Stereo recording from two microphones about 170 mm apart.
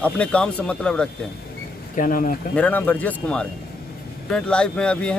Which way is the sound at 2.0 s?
55° left (ahead or behind).